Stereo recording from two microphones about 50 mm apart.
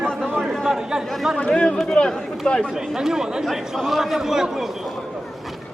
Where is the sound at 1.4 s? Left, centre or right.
Left.